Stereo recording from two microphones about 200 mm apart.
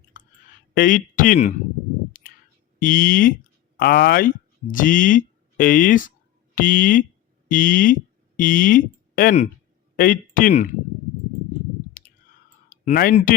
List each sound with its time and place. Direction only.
0.1 s clicking: 40° left (ahead or behind)
0.7 s speech: 45° left (ahead or behind)
2.1 s a sound: 45° left (ahead or behind)
2.7 s a man's voice: 45° left (ahead or behind)
12.6 s speech: 40° left (ahead or behind)